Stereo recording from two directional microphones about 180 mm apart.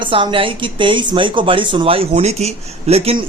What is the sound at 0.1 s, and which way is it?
Speech, 30° right (ahead or behind).